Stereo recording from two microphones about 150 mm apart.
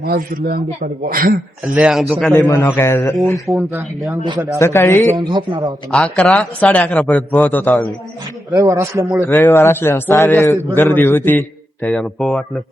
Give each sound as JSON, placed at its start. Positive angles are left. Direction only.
{"t": 0.0, "sound": "a man's voice", "side_deg": -90}
{"t": 1.7, "sound": "a man's voice", "side_deg": -5}
{"t": 2.5, "sound": "a man's voice", "side_deg": 20}
{"t": 4.3, "sound": "speech", "side_deg": -20}
{"t": 4.6, "sound": "a man's voice", "side_deg": 15}
{"t": 5.1, "sound": "a man's voice", "side_deg": -30}
{"t": 5.9, "sound": "a man's voice", "side_deg": 5}
{"t": 8.5, "sound": "speech", "side_deg": -20}
{"t": 9.4, "sound": "a man's voice", "side_deg": 20}